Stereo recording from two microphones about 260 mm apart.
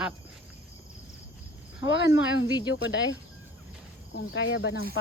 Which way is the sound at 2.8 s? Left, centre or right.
Left.